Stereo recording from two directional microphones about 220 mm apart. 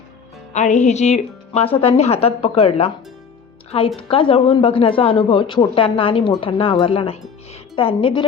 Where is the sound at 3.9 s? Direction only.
25° left (ahead or behind).